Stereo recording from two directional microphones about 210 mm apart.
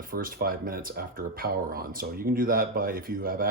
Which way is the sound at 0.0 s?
40° right (ahead or behind).